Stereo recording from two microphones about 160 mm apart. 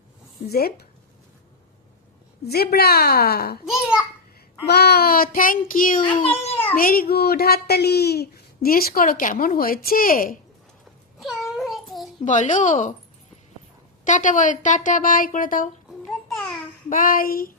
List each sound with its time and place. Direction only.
0.4 s a child's voice: 75° left (ahead or behind)
2.5 s a child's voice: 80° left
4.6 s a child's voice: 85° left; by 6.1 s 60° left (ahead or behind)
6.2 s a child's voice: 40° left (ahead or behind)
6.7 s a child's voice: 65° left (ahead or behind)
11.2 s child singing: centre (ahead or behind)
12.2 s a woman's voice: 50° left (ahead or behind)
14.0 s a woman's voice: 50° left (ahead or behind)
16.9 s a child's voice: 60° left (ahead or behind)